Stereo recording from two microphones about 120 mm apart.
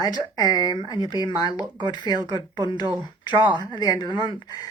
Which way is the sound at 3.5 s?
35° left (ahead or behind).